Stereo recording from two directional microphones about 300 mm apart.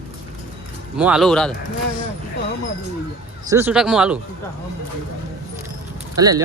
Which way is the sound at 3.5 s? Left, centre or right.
Centre.